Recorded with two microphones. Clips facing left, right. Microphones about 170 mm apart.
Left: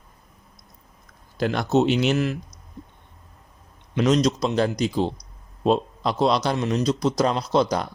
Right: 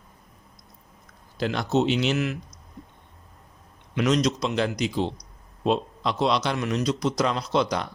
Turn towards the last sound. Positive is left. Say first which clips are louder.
# left 3 dB
turn(degrees=40)  # may be behind; listen again after turning